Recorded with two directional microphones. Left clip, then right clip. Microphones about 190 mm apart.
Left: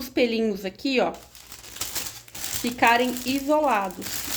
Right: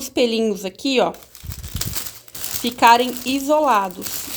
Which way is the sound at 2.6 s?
35° right (ahead or behind).